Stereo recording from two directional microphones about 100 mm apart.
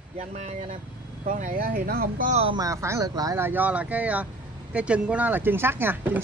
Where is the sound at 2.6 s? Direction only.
30° right (ahead or behind).